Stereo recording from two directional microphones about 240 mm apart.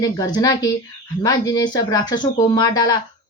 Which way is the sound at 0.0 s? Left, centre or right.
Centre.